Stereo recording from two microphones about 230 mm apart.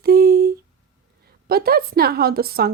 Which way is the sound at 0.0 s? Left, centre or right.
Right.